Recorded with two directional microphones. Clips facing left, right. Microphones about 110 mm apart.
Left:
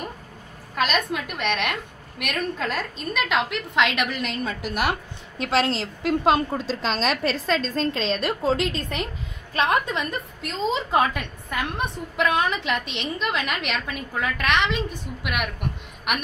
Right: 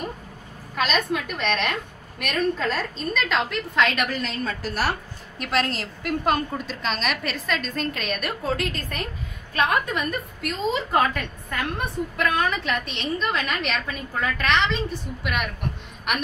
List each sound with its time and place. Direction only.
1.2 s a woman's voice: 10° left (ahead or behind)
5.4 s a woman's voice: 25° left (ahead or behind)